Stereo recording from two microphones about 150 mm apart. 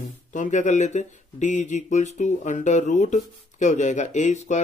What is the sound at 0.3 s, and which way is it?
Speech, 55° left (ahead or behind).